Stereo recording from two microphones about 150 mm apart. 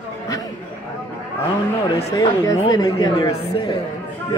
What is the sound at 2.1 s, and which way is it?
Speech, 20° left (ahead or behind).